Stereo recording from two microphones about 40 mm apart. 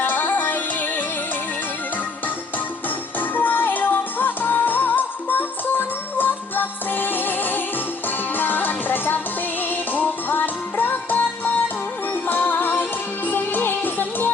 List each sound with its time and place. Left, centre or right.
0.0 s music: left
3.2 s music: left
12.3 s music: left